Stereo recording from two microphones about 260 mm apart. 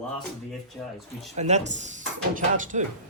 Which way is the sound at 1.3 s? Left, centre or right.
Right.